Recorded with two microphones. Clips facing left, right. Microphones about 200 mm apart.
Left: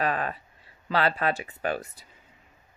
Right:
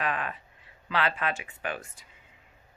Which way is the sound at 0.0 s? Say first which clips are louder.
Left 4 dB; 35° left (ahead or behind).